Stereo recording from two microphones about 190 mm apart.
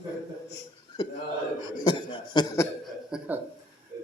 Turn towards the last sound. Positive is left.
turn(degrees=-5)  # may be behind; listen again after turning